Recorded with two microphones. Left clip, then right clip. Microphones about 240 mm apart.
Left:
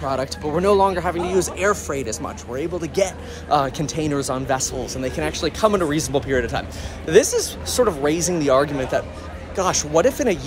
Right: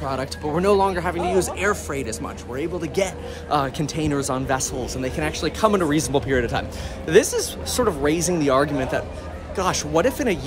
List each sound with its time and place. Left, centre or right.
0.0 s speech: centre